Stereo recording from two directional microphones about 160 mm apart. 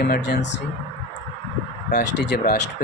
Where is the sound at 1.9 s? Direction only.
90° left.